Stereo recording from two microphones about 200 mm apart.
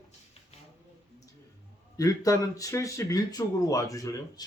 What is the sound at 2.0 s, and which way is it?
Speech, 15° left (ahead or behind).